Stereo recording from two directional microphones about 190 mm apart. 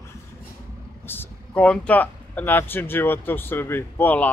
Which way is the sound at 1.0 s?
10° left (ahead or behind).